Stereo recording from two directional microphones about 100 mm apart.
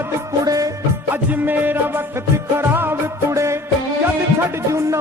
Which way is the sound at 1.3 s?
20° right (ahead or behind).